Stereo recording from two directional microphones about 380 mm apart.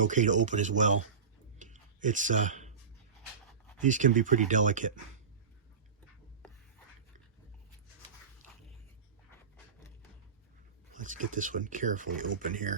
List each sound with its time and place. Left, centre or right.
0.0 s speech: centre
1.5 s clicking: centre
3.8 s speech: centre
10.9 s speech: centre